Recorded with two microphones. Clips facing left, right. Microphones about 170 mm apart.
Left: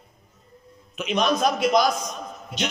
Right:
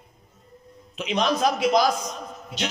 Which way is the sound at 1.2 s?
30° right (ahead or behind).